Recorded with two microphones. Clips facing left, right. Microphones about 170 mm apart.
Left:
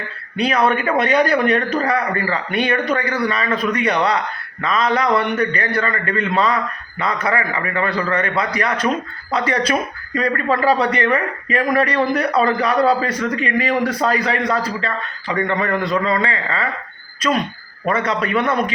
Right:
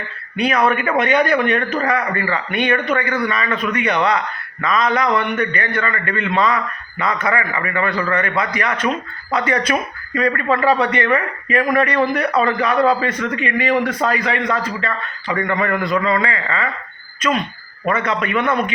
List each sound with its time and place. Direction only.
0.3 s a man's voice: 30° left (ahead or behind)
17.8 s a man's voice: 35° left (ahead or behind)